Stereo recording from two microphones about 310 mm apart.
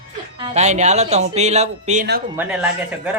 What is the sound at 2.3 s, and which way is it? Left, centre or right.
Speech, centre.